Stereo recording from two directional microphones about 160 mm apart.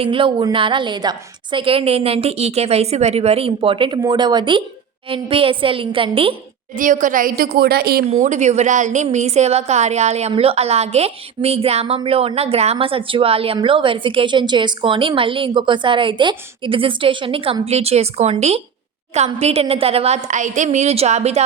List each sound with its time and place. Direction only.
0.0 s speech: 30° right (ahead or behind)
6.7 s a woman's voice: 55° right (ahead or behind); by 8.0 s 75° right (ahead or behind)
8.1 s a woman's voice: 50° right (ahead or behind)